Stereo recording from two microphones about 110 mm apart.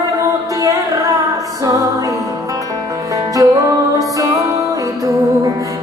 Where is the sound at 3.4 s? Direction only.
30° right (ahead or behind).